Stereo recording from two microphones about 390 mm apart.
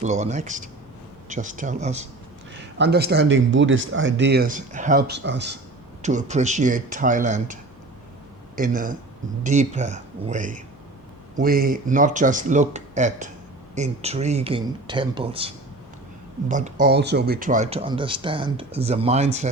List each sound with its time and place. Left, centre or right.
0.0 s speech: centre